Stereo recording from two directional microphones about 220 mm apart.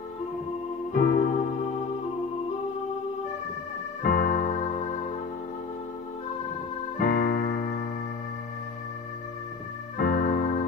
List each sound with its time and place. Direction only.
0.9 s keyboard: 40° left (ahead or behind)
4.0 s electric piano: 40° left (ahead or behind)
7.0 s keyboard: 40° left (ahead or behind)
9.9 s electric piano: 40° left (ahead or behind)